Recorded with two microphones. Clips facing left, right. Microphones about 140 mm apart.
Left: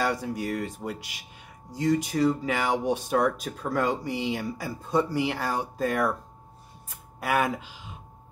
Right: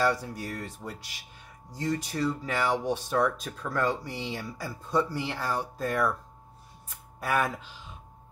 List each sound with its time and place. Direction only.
0.0 s speech: 15° left (ahead or behind)
0.8 s speech: 30° left (ahead or behind)
1.7 s speech: 15° left (ahead or behind)
7.2 s speech: 15° left (ahead or behind)